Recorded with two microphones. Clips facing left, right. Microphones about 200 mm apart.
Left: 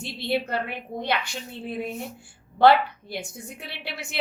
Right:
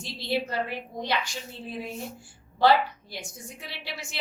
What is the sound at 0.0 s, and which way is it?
A woman's voice, 60° left (ahead or behind).